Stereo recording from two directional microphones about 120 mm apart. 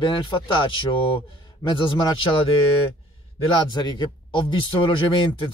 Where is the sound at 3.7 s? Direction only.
35° left (ahead or behind).